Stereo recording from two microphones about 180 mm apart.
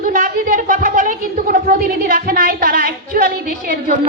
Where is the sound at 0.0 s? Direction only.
45° right (ahead or behind).